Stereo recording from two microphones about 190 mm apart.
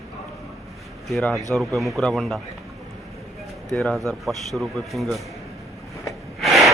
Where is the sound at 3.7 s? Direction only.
Centre (ahead or behind).